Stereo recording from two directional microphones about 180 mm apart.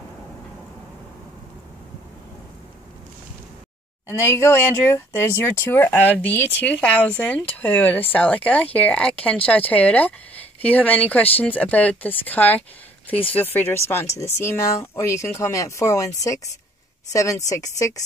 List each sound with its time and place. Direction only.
4.1 s speech: 15° left (ahead or behind)